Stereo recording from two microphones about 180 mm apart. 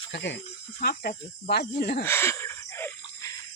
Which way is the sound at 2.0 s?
15° left (ahead or behind).